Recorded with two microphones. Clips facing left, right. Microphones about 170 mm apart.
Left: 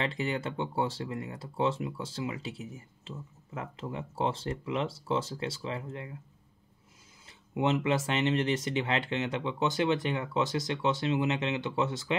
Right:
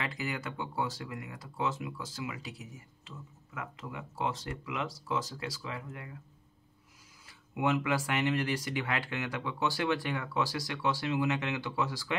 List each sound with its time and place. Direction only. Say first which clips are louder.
0.0 s speech: left 5 dB; 30° left (ahead or behind)
7.2 s speech: left 2 dB; 25° left (ahead or behind)